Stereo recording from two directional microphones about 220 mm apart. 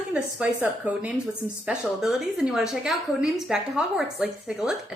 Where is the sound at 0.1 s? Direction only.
5° right (ahead or behind).